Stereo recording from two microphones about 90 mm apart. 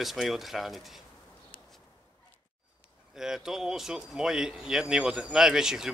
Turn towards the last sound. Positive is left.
turn(degrees=-5)  # may be behind; listen again after turning